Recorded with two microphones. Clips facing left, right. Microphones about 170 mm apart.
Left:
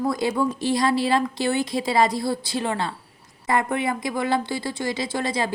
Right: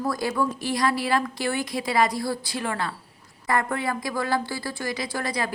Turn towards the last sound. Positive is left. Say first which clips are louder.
# left 3 dB
turn(degrees=25)  # may be behind; listen again after turning